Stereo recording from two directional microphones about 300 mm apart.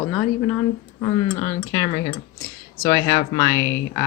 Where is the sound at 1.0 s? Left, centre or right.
Left.